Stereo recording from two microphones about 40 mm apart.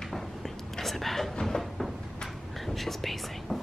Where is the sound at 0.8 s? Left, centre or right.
Centre.